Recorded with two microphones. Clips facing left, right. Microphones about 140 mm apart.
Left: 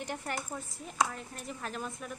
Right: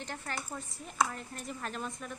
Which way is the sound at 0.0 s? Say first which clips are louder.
Left 3 dB; 15° left (ahead or behind).